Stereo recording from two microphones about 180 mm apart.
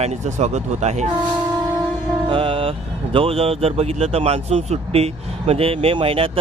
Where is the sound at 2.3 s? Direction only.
30° right (ahead or behind).